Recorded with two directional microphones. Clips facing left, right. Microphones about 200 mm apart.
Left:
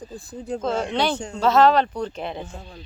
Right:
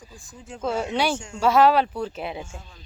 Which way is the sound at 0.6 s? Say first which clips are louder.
Even; 10° right (ahead or behind).